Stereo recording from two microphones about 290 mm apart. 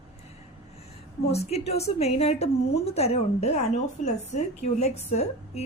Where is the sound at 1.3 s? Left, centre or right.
Left.